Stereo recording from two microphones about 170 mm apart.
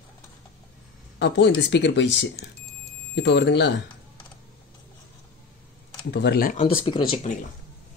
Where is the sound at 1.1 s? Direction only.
90° left.